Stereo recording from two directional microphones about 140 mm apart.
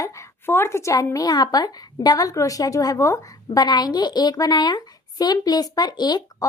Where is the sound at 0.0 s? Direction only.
15° left (ahead or behind).